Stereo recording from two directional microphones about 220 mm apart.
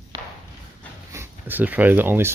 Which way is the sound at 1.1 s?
10° right (ahead or behind).